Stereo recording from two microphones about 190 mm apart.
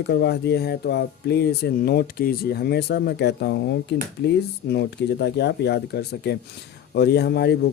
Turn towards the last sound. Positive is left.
turn(degrees=55)  # may be behind; listen again after turning